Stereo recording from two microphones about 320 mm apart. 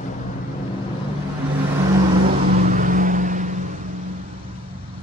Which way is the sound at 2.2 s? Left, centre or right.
Right.